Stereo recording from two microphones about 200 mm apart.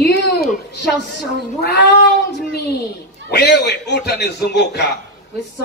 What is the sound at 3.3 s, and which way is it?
A man's voice, 55° left (ahead or behind).